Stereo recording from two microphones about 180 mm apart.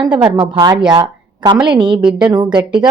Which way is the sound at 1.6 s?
25° right (ahead or behind).